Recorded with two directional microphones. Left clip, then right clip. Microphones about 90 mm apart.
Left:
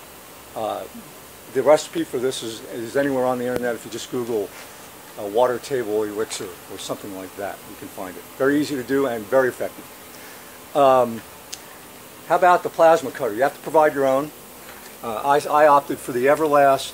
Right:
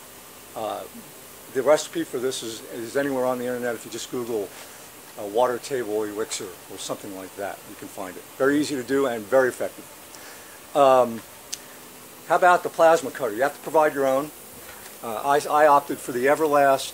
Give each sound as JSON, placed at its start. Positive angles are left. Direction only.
{"t": 0.6, "sound": "speech", "side_deg": 5}
{"t": 6.9, "sound": "speech", "side_deg": -25}
{"t": 7.4, "sound": "speech", "side_deg": -35}
{"t": 10.7, "sound": "speech", "side_deg": -40}
{"t": 12.3, "sound": "speech", "side_deg": -20}
{"t": 15.0, "sound": "speech", "side_deg": -15}